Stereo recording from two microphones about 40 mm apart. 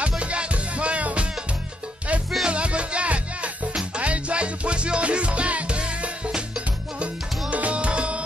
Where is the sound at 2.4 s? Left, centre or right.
Right.